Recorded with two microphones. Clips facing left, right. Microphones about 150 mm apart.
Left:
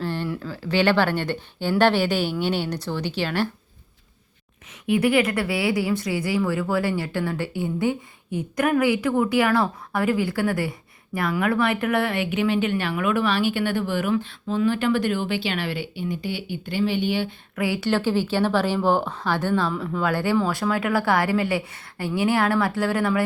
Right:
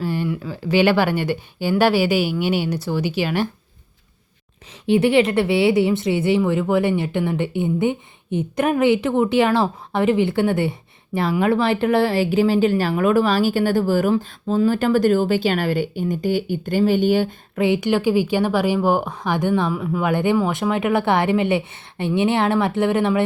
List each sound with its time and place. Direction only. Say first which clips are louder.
0.0 s a sound: right 4 dB; 10° right (ahead or behind)
0.3 s a woman's voice: right 4 dB; 10° right (ahead or behind)
4.9 s speech: right 4 dB; 25° right (ahead or behind); by 17.3 s 45° right (ahead or behind)
17.5 s speech: right 5 dB; 25° right (ahead or behind)